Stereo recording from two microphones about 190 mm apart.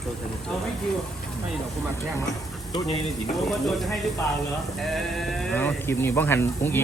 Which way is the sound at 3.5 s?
Centre (ahead or behind).